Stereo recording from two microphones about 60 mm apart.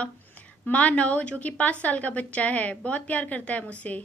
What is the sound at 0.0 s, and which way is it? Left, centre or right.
A woman's voice, left.